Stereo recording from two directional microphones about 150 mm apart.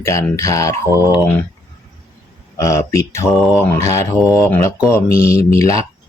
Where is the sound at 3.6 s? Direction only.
15° left (ahead or behind).